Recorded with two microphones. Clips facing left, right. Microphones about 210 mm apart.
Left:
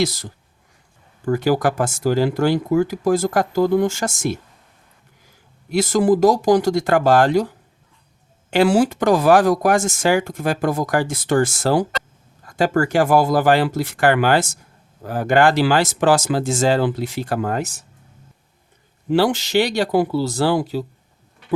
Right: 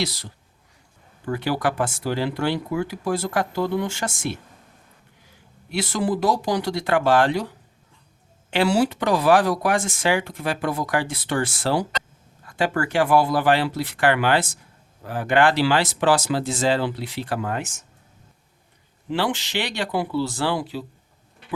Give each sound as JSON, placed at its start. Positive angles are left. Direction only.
{"t": 0.0, "sound": "speech", "side_deg": 45}
{"t": 5.7, "sound": "speech", "side_deg": 45}
{"t": 19.1, "sound": "speech", "side_deg": 40}